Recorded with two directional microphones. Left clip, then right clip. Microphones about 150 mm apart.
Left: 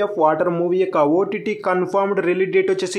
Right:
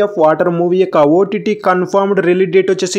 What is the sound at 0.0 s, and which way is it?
Speech, 30° right (ahead or behind).